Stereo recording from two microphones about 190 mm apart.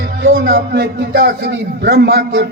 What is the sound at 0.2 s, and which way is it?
A man's voice, 60° right (ahead or behind).